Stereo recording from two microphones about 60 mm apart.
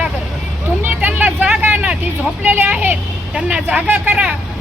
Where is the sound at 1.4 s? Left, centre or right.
Right.